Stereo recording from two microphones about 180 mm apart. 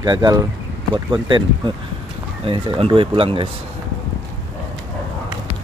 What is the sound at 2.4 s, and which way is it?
Speech, 30° right (ahead or behind).